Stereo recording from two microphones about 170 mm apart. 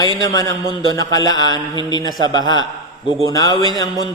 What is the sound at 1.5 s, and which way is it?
Mantra, 30° right (ahead or behind).